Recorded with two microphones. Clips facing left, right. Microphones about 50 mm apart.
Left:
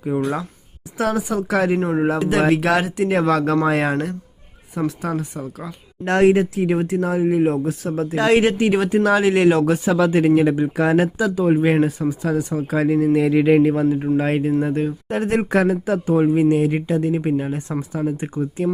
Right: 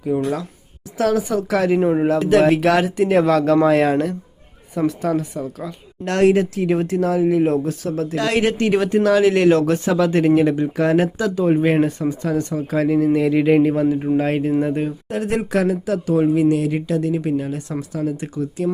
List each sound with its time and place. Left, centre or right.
0.1 s speech: centre
6.1 s speech: centre
7.4 s speech: centre
15.1 s speech: left